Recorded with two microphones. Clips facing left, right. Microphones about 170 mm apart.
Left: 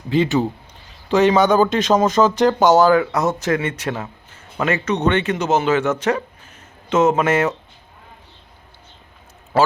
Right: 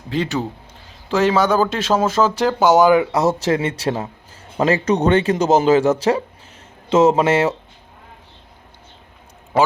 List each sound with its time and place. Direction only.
0.1 s speech: centre (ahead or behind); by 7.5 s 25° right (ahead or behind)
9.5 s speech: 20° right (ahead or behind)